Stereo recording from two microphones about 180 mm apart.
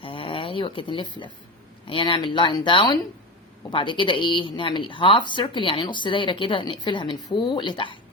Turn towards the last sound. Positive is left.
turn(degrees=25)  # may be behind; listen again after turning